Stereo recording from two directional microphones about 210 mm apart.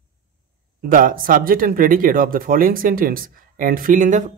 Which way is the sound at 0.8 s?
40° right (ahead or behind).